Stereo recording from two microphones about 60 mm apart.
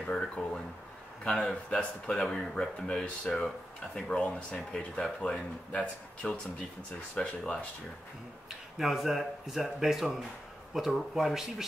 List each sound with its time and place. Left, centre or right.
0.1 s speech: centre
1.7 s speech: centre
8.5 s speech: centre